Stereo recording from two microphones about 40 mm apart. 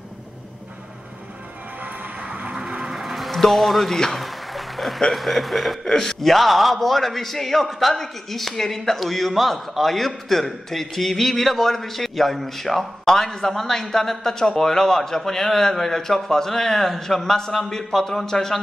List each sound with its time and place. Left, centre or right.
2.2 s train: right
2.5 s vehicle: centre
2.8 s music: centre
4.2 s a sound: centre
5.1 s a man's voice: centre